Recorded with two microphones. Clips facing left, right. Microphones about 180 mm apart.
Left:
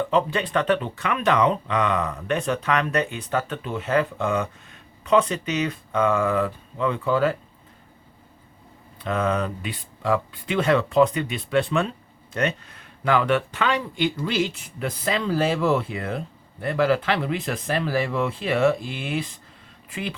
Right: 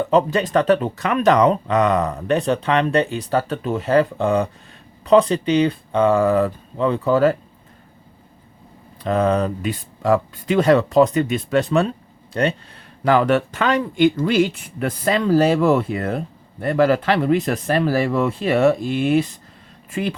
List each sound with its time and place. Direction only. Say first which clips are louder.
0.1 s speech: right 5 dB; 40° right (ahead or behind)
9.0 s speech: right 6 dB; 35° right (ahead or behind)